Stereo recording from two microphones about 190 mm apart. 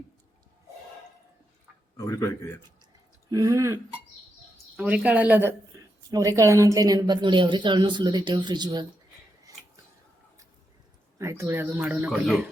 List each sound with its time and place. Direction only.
2.0 s speech: 15° left (ahead or behind)
3.2 s speech: 15° right (ahead or behind)
4.8 s a woman's voice: 5° right (ahead or behind)
9.5 s a sound: 20° right (ahead or behind)
11.2 s speech: 15° right (ahead or behind)